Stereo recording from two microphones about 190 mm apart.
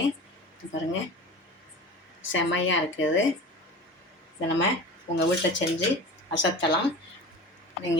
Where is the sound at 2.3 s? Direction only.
90° left.